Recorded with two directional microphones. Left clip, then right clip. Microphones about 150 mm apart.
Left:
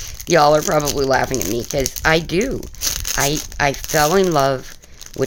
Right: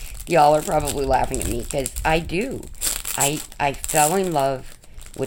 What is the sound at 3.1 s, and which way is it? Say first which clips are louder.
Speech: left 3 dB; 40° left (ahead or behind).